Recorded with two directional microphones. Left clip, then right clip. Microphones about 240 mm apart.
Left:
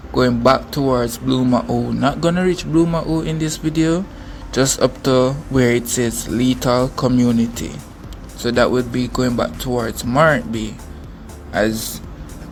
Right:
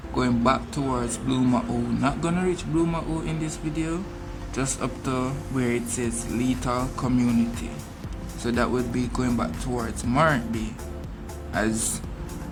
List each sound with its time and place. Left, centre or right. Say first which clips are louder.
0.1 s speech: left 9 dB; left
8.4 s speech: left 9 dB; centre